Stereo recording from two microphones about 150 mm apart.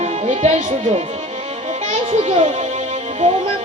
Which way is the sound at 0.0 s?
50° right (ahead or behind).